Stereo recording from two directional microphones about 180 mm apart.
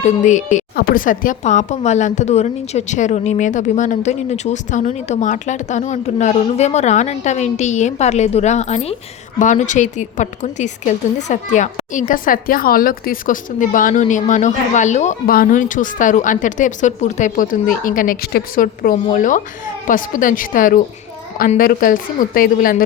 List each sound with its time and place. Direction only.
0.0 s a woman's voice: 40° left (ahead or behind)
0.5 s a woman's voice: 55° left (ahead or behind)